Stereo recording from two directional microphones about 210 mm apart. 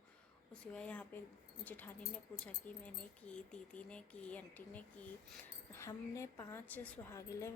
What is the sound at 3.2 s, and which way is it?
A woman's voice, 5° left (ahead or behind).